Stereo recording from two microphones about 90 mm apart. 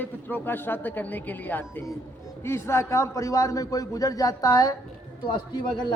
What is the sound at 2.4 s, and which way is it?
A man's voice, 30° left (ahead or behind).